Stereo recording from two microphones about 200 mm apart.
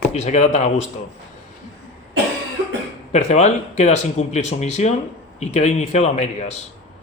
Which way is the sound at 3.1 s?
35° left (ahead or behind).